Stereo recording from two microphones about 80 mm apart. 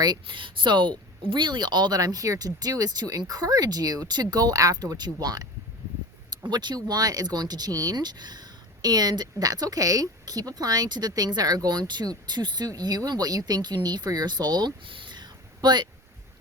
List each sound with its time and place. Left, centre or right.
0.0 s speech: right
6.5 s speech: right